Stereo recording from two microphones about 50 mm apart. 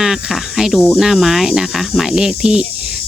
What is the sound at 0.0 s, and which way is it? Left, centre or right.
Speech, centre.